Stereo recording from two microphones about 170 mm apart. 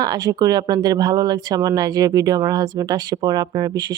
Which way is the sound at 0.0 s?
20° right (ahead or behind).